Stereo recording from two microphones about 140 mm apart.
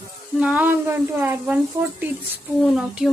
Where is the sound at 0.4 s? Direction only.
10° right (ahead or behind).